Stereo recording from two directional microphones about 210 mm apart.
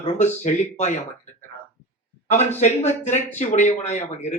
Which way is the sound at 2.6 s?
35° left (ahead or behind).